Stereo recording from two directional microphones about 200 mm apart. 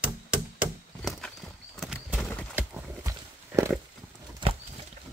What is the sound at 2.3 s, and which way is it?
Bird flight, 5° left (ahead or behind).